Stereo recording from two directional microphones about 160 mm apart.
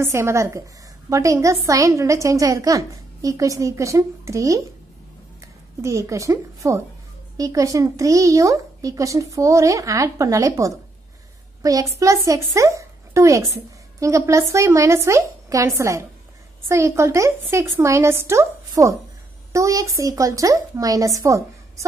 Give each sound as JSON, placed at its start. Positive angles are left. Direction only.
{"t": 0.0, "sound": "a woman's voice", "side_deg": -15}
{"t": 5.8, "sound": "a woman's voice", "side_deg": -20}